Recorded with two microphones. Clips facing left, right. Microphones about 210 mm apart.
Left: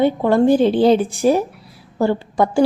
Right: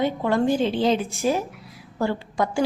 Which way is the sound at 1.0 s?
35° left (ahead or behind).